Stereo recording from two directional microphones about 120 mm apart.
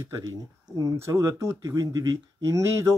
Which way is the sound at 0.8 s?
25° right (ahead or behind).